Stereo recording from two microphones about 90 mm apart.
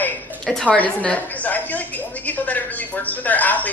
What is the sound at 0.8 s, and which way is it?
A woman's voice, 15° left (ahead or behind).